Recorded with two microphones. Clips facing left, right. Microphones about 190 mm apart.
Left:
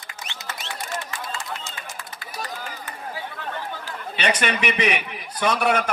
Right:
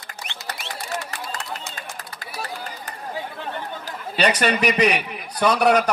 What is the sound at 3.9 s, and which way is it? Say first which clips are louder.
A man's voice: right 4 dB; 40° right (ahead or behind).